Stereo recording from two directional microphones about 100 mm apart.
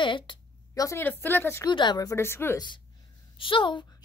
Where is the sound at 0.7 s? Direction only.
35° left (ahead or behind).